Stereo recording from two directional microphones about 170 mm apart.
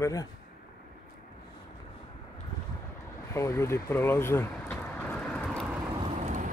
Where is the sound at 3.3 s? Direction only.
15° left (ahead or behind).